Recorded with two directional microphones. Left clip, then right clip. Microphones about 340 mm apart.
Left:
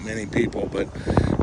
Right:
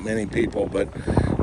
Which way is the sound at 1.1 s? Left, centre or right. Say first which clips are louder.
Left 3 dB; right.